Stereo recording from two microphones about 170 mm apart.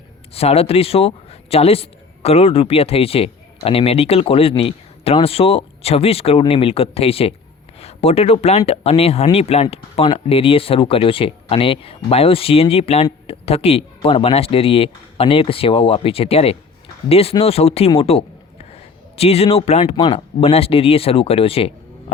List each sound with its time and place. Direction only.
0.3 s a man's voice: 35° left (ahead or behind)